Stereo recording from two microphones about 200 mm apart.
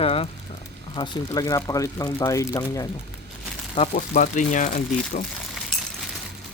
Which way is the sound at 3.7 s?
35° left (ahead or behind).